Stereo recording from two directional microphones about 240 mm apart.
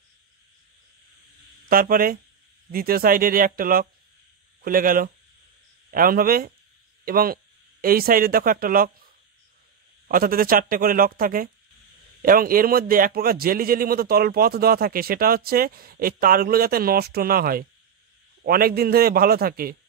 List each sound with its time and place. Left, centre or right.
1.7 s a man's voice: right
10.0 s a man's voice: right